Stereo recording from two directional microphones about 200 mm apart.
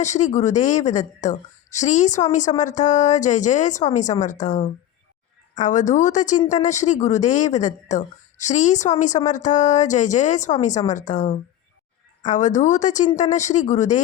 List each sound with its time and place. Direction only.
0.0 s speech: 35° left (ahead or behind)